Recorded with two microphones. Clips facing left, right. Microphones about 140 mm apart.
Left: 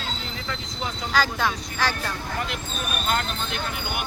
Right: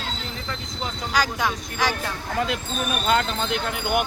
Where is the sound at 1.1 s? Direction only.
15° right (ahead or behind).